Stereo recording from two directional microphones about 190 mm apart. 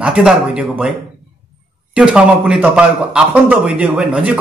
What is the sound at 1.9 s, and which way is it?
Speech, 5° right (ahead or behind).